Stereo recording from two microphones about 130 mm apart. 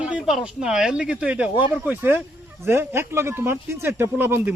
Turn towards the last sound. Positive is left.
turn(degrees=-15)  # may be behind; listen again after turning